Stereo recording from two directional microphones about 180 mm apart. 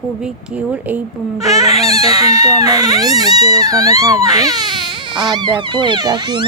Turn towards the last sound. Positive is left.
turn(degrees=-25)  # may be behind; listen again after turning